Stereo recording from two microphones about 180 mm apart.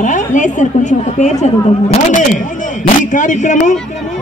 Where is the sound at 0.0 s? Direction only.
45° left (ahead or behind).